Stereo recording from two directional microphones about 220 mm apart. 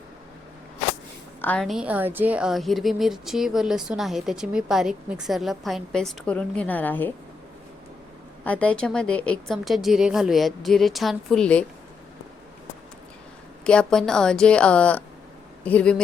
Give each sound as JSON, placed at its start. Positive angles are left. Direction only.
{"t": 1.4, "sound": "a woman's voice", "side_deg": 5}
{"t": 8.4, "sound": "a woman's voice", "side_deg": 5}
{"t": 13.7, "sound": "a woman's voice", "side_deg": 5}